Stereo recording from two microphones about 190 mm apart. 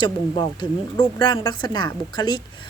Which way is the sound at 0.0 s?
20° left (ahead or behind).